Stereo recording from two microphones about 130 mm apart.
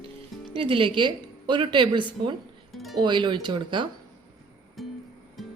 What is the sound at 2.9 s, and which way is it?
Speech, 35° right (ahead or behind).